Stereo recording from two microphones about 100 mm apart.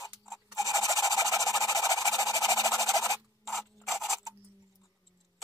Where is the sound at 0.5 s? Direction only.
35° right (ahead or behind).